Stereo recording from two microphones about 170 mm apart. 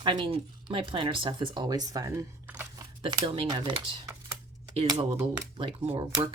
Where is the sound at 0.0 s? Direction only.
30° right (ahead or behind); by 2.8 s 15° right (ahead or behind).